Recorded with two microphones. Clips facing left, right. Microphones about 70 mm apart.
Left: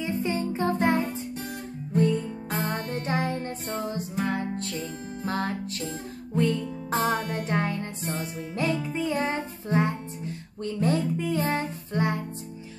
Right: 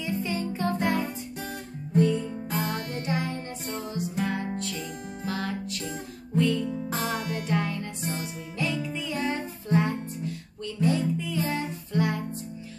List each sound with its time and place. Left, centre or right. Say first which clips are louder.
0.0 s music: left 2 dB; left
10.6 s music: even; left